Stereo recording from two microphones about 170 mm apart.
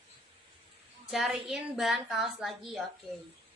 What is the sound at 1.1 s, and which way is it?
A woman's voice, centre (ahead or behind).